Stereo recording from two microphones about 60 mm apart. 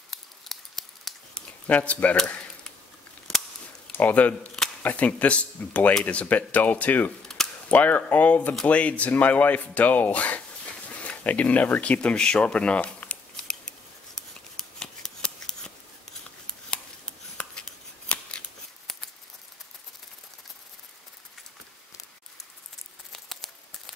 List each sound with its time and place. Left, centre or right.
0.1 s scissors: centre
1.7 s speech: left
3.3 s scissors: centre
3.9 s speech: left
7.4 s cap gun: centre
7.7 s speech: left
14.1 s scissors: centre
17.4 s scissors: centre
23.1 s a sound: centre